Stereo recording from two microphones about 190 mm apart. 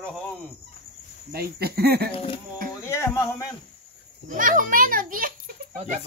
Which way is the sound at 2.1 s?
30° left (ahead or behind).